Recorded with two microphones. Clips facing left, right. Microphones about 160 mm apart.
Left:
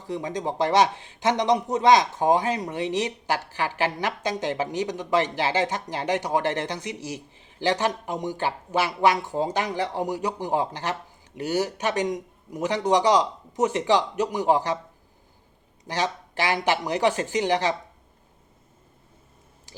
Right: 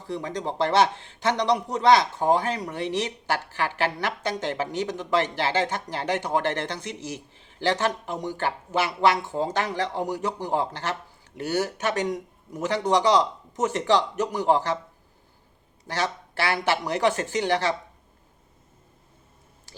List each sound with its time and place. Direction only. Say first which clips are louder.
0.1 s speech: left 1 dB; 20° left (ahead or behind)
15.9 s speech: left 1 dB; 15° left (ahead or behind)